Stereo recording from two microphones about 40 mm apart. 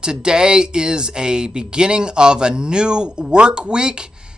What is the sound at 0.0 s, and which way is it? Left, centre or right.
Speech, centre.